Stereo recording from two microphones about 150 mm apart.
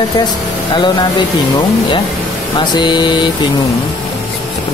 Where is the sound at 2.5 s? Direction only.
30° left (ahead or behind).